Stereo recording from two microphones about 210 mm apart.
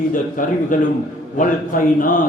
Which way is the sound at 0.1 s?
40° left (ahead or behind).